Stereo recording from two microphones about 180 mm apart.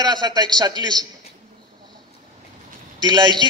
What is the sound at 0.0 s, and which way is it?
A man's voice, 25° right (ahead or behind).